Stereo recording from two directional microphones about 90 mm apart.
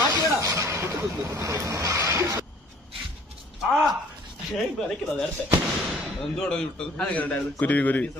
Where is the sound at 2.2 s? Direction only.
35° right (ahead or behind).